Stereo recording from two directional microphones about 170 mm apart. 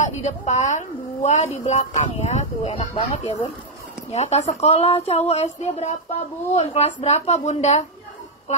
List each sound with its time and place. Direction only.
0.0 s a woman's voice: 45° left (ahead or behind)